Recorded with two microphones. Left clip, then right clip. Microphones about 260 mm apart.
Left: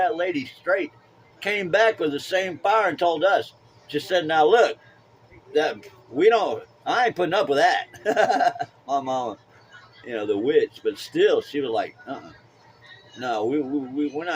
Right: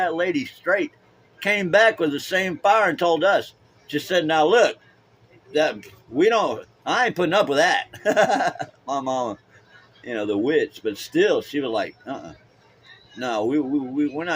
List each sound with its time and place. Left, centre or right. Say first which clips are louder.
0.0 s a man's voice: right 1 dB; right
13.1 s speech: right 1 dB; right